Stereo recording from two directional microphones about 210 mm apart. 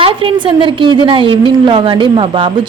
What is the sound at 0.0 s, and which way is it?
A woman's voice, 25° right (ahead or behind).